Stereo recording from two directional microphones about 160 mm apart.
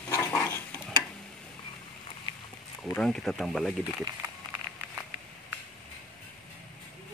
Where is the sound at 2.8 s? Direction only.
5° left (ahead or behind).